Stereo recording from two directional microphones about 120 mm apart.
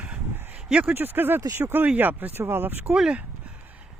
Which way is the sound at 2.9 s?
5° right (ahead or behind).